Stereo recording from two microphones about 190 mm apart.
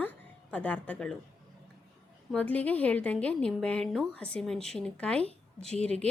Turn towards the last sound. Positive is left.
turn(degrees=5)  # may be behind; listen again after turning